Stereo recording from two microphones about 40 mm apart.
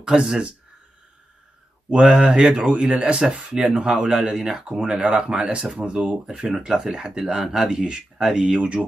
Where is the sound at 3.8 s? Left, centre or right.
Right.